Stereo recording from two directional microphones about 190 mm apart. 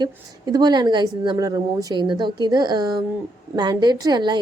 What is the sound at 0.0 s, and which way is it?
A woman's voice, 20° right (ahead or behind).